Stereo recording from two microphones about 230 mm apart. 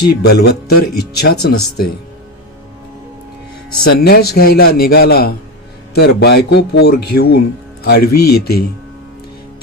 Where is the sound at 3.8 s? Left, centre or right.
Left.